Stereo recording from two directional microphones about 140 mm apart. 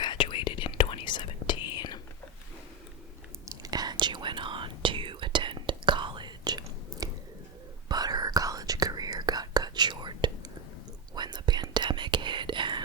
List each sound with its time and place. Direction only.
0.0 s whispering: 35° left (ahead or behind)
3.4 s whispering: 25° right (ahead or behind)